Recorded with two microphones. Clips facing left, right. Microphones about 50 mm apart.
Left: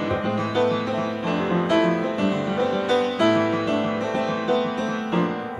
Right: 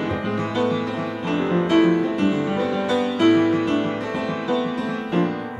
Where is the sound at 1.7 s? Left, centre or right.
Right.